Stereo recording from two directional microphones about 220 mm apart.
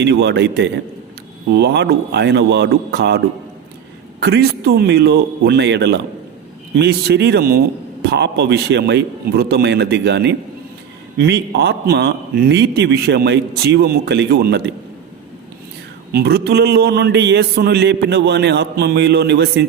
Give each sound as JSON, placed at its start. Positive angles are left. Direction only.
{"t": 0.0, "sound": "a man's voice", "side_deg": -50}
{"t": 4.2, "sound": "a man's voice", "side_deg": -45}
{"t": 16.1, "sound": "a man's voice", "side_deg": -45}